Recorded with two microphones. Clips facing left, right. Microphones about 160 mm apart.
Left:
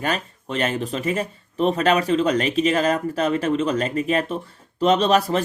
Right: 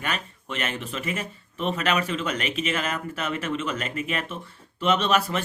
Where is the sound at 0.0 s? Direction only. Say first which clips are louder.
Left 6 dB; 35° left (ahead or behind).